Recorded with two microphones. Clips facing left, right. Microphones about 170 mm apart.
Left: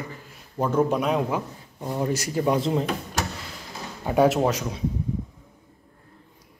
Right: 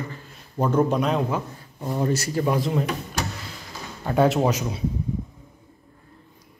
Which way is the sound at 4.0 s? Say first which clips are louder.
Even; 5° left (ahead or behind).